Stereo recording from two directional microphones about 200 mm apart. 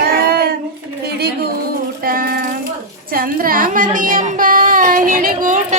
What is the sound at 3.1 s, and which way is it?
Speech, 45° right (ahead or behind).